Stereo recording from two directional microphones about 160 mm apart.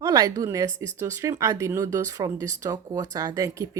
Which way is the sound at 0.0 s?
25° right (ahead or behind).